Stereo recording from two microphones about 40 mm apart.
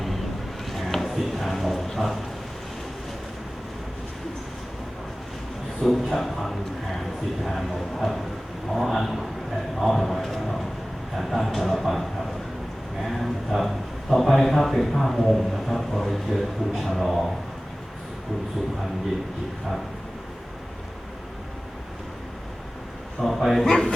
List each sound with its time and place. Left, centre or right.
0.7 s a sound: centre
5.8 s speech: centre
13.0 s a sound: centre
14.1 s speech: centre
23.2 s speech: centre
23.6 s a man's voice: centre